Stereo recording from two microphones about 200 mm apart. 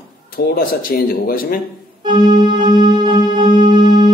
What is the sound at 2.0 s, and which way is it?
Organ, 20° right (ahead or behind).